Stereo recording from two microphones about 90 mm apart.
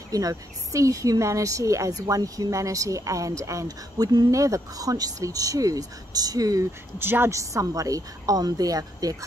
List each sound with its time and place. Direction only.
0.1 s speech: 40° right (ahead or behind)
7.0 s a woman's voice: 25° right (ahead or behind)
7.3 s speech: 40° right (ahead or behind)